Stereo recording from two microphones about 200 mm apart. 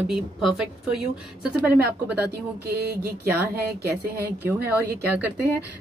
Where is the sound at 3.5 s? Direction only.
50° right (ahead or behind).